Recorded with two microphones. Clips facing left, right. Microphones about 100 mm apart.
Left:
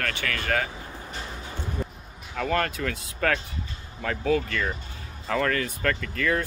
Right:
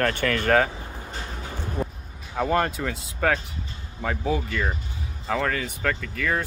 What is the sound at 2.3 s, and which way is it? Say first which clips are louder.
Speech: right 3 dB; 20° right (ahead or behind).